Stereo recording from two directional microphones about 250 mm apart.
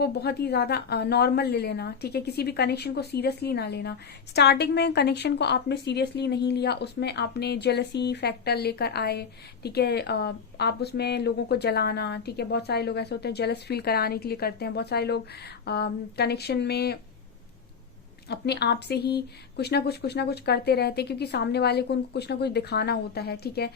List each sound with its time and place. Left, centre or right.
0.0 s a woman's voice: left
18.3 s a woman's voice: left